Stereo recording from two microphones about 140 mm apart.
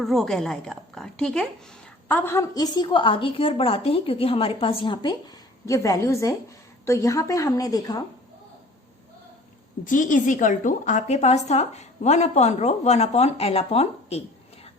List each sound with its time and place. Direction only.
0.0 s a woman's voice: centre (ahead or behind); by 5.1 s 35° left (ahead or behind)
5.6 s a woman's voice: 25° left (ahead or behind)
9.8 s a woman's voice: 70° left (ahead or behind); by 14.2 s 50° left (ahead or behind)